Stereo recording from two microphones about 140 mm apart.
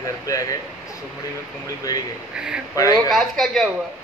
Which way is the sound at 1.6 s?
25° left (ahead or behind).